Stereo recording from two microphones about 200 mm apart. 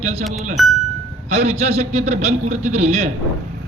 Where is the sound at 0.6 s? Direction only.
Centre (ahead or behind).